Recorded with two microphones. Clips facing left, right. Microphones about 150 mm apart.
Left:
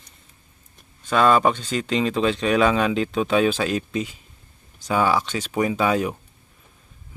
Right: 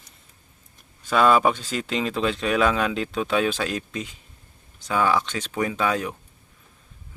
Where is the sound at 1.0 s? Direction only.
5° right (ahead or behind).